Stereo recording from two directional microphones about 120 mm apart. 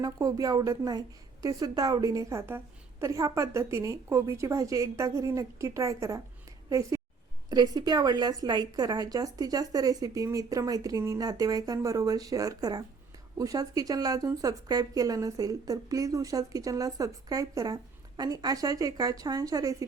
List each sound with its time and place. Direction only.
0.0 s a woman's voice: 30° right (ahead or behind)